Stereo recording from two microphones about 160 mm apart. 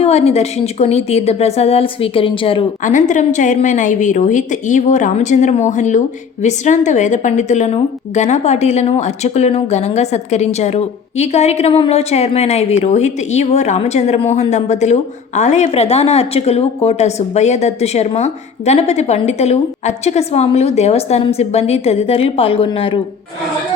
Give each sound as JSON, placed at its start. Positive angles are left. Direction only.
{"t": 0.0, "sound": "a woman's voice", "side_deg": 40}
{"t": 2.8, "sound": "a woman's voice", "side_deg": 50}